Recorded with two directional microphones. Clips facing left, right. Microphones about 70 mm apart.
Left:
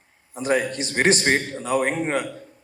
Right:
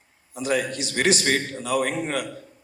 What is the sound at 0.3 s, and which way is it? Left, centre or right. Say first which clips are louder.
A man's voice: left 2 dB; left.